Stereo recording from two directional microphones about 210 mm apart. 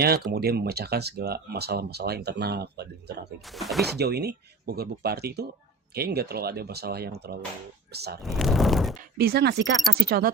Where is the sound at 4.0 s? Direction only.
50° right (ahead or behind).